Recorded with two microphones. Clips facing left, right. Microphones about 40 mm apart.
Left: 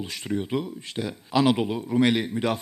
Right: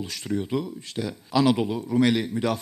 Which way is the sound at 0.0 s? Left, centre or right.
Left.